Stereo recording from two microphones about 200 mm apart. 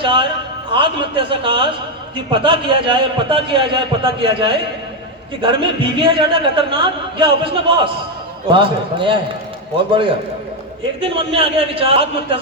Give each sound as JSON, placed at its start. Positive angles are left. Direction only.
{"t": 0.0, "sound": "a sound", "side_deg": -25}
{"t": 0.7, "sound": "a man's voice", "side_deg": -25}
{"t": 5.4, "sound": "a man's voice", "side_deg": -25}
{"t": 11.0, "sound": "a man's voice", "side_deg": -25}